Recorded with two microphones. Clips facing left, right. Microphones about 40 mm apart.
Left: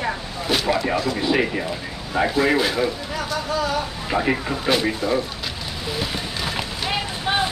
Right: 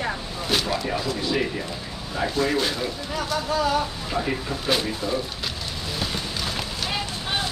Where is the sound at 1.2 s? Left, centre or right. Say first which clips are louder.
Left 4 dB; left; by 3.7 s centre.